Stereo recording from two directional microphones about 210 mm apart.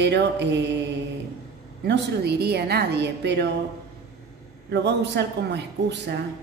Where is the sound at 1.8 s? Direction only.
55° right (ahead or behind).